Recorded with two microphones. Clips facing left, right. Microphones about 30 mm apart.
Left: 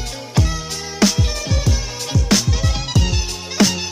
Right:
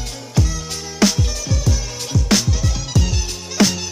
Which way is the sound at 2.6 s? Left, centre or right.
Left.